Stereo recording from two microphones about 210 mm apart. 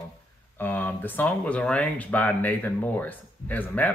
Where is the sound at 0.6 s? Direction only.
10° left (ahead or behind).